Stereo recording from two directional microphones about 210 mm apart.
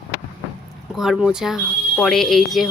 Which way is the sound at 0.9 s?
Centre (ahead or behind).